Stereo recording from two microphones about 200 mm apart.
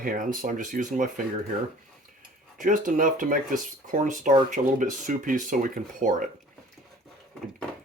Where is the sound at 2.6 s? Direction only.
40° right (ahead or behind).